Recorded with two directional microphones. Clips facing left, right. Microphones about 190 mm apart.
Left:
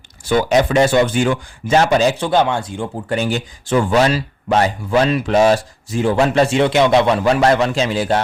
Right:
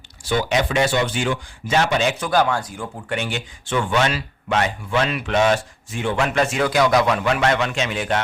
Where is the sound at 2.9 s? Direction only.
40° left (ahead or behind).